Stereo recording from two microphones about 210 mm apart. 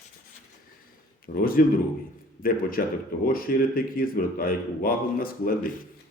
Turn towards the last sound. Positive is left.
turn(degrees=45)  # may be behind; listen again after turning